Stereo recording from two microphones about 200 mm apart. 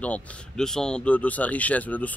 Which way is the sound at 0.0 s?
5° left (ahead or behind).